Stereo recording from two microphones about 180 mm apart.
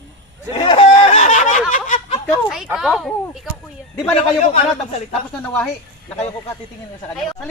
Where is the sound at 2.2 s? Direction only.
Centre (ahead or behind).